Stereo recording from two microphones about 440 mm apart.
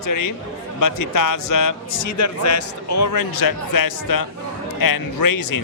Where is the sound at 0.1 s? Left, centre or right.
Left.